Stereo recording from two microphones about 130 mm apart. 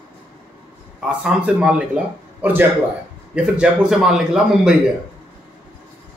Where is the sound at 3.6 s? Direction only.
5° right (ahead or behind).